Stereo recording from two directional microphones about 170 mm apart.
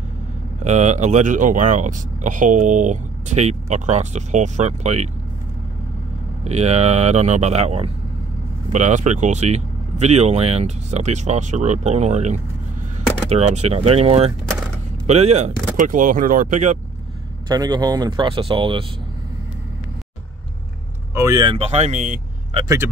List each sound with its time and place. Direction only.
0.7 s speech: 45° right (ahead or behind)
6.4 s speech: 40° right (ahead or behind)
17.5 s speech: 25° right (ahead or behind)
21.1 s speech: 20° right (ahead or behind)
21.5 s speech: 40° right (ahead or behind)
22.6 s speech: 20° right (ahead or behind)